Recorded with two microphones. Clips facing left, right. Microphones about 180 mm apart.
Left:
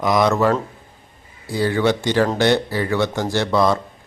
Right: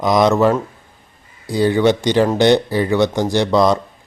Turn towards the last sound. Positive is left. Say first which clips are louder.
# right 3 dB
turn(degrees=-15)  # may be behind; listen again after turning